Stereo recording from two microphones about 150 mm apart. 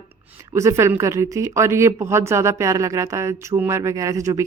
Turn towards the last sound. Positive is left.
turn(degrees=-20)  # may be behind; listen again after turning